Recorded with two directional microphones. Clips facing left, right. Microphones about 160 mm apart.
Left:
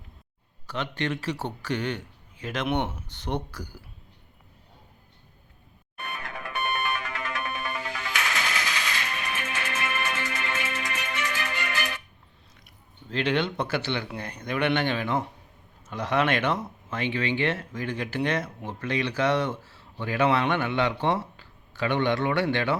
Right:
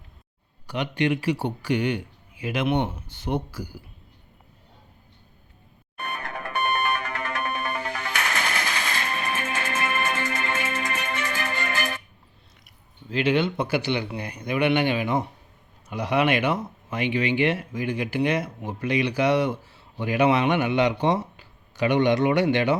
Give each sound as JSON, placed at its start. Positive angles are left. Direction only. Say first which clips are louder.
{"t": 0.7, "sound": "speech", "louder": "right 5 dB", "side_deg": -15}
{"t": 6.0, "sound": "music", "louder": "right 4 dB", "side_deg": -55}
{"t": 13.1, "sound": "speech", "louder": "right 4 dB", "side_deg": -5}